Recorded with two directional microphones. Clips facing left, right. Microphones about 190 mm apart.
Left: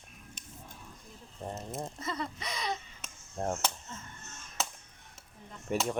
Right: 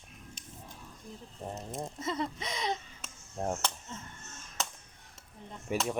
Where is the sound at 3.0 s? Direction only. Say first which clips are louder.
Even; 5° right (ahead or behind).